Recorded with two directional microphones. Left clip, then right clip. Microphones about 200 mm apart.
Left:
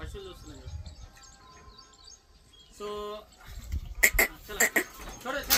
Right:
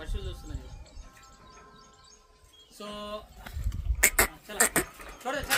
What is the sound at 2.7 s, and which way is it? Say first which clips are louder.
Speech: left 2 dB; 40° right (ahead or behind).